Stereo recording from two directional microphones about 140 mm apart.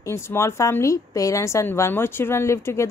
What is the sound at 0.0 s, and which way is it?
A woman's voice, 20° left (ahead or behind).